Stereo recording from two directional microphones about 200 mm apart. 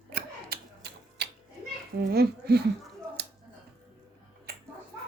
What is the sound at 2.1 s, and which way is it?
Speech, 50° right (ahead or behind).